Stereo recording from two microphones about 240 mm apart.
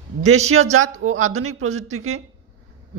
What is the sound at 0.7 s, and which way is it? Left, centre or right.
A woman's voice, right.